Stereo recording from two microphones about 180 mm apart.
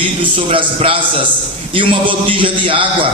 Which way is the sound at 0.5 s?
30° right (ahead or behind).